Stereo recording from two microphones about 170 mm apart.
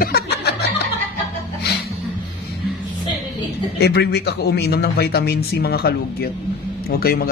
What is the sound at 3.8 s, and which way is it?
A man's voice, 75° left (ahead or behind).